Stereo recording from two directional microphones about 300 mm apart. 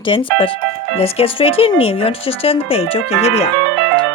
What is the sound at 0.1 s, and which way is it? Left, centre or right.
Speech, centre.